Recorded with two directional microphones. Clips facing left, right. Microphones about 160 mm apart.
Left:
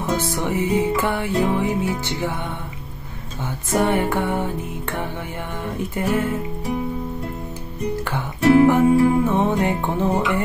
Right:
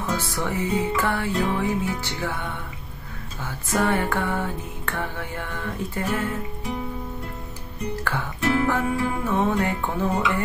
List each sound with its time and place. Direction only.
0.0 s music: 20° left (ahead or behind)
3.7 s music: 20° left (ahead or behind)
8.4 s music: 35° left (ahead or behind)
8.6 s music: 20° left (ahead or behind)